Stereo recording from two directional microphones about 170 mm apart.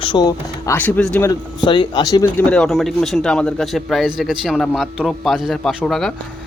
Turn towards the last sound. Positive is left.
turn(degrees=5)  # may be behind; listen again after turning